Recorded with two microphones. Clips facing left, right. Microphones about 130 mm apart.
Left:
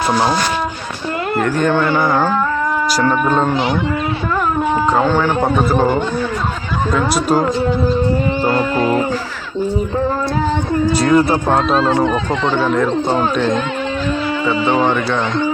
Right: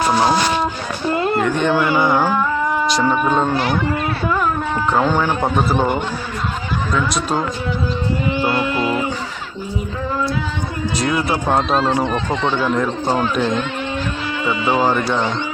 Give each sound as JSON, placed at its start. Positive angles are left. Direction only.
{"t": 0.1, "sound": "a man's voice", "side_deg": -5}
{"t": 1.6, "sound": "a man's voice", "side_deg": -10}
{"t": 5.0, "sound": "a man's voice", "side_deg": -15}
{"t": 6.9, "sound": "speech", "side_deg": 5}
{"t": 8.4, "sound": "speech", "side_deg": 40}
{"t": 11.0, "sound": "speech", "side_deg": 35}
{"t": 11.7, "sound": "speech", "side_deg": 0}